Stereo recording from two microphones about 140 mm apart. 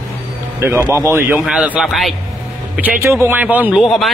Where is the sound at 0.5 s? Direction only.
15° right (ahead or behind).